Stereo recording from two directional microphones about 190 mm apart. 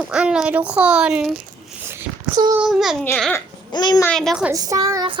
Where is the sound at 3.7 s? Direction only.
20° left (ahead or behind).